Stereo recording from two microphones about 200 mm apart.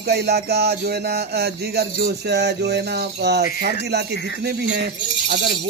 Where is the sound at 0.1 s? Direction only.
55° right (ahead or behind).